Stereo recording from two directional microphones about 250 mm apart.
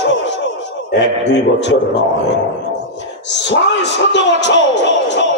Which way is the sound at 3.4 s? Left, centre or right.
Left.